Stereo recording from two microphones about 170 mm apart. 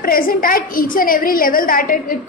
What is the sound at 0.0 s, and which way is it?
A woman's voice, 60° left (ahead or behind).